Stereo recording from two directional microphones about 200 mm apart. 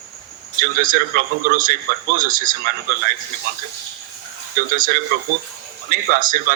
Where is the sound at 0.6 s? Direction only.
40° right (ahead or behind).